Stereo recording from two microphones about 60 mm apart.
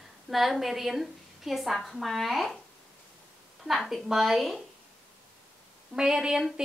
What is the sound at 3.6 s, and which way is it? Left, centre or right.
Speech, centre.